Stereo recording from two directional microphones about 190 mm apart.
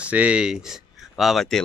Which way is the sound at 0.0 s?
5° right (ahead or behind).